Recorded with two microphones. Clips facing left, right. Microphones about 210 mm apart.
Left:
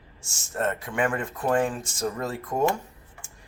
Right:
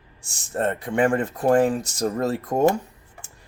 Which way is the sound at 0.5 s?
35° right (ahead or behind).